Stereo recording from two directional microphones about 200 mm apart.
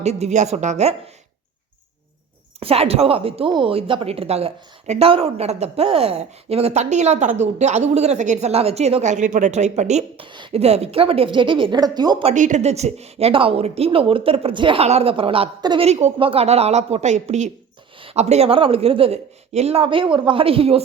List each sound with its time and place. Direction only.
0.0 s a woman's voice: 35° right (ahead or behind)
2.6 s a woman's voice: 30° right (ahead or behind)
12.3 s a woman's voice: 35° right (ahead or behind)